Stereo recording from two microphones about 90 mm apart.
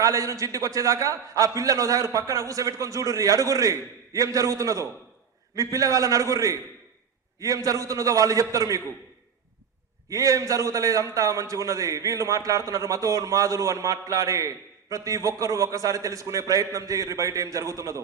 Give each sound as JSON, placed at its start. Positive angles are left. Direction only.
{"t": 0.0, "sound": "a man's voice", "side_deg": -40}
{"t": 10.1, "sound": "a man's voice", "side_deg": -40}